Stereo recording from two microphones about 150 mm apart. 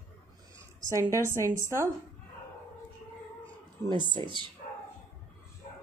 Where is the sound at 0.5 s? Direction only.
20° right (ahead or behind).